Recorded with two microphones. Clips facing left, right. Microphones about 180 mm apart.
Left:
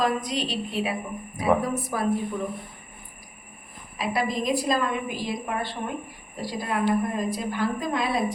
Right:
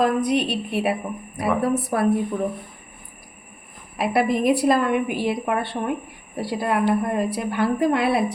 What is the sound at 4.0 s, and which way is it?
A woman's voice, 60° right (ahead or behind).